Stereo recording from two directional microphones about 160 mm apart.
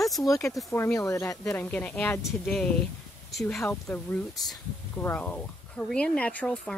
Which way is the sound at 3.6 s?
10° left (ahead or behind).